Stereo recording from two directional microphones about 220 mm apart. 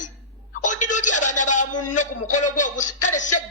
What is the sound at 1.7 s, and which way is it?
Speech, 90° left.